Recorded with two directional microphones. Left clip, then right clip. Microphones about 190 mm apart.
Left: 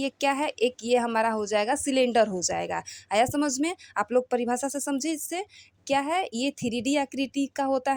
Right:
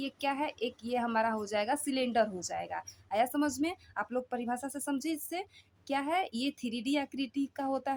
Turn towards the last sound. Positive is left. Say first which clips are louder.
# left 8 dB
turn(degrees=30)  # may be behind; listen again after turning